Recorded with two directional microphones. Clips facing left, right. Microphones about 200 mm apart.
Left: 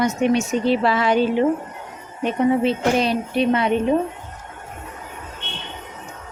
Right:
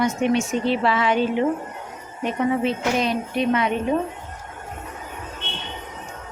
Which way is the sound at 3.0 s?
30° left (ahead or behind).